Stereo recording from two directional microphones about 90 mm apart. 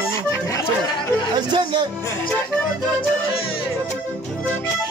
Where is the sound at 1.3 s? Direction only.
65° right (ahead or behind).